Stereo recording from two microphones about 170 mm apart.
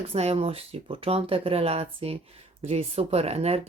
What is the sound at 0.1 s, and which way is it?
Speech, 35° right (ahead or behind).